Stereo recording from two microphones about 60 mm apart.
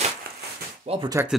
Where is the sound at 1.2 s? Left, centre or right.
Right.